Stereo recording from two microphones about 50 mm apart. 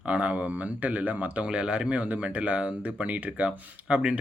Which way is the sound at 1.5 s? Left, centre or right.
Centre.